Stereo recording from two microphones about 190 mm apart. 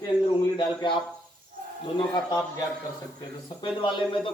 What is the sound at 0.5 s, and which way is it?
Speech, 25° left (ahead or behind).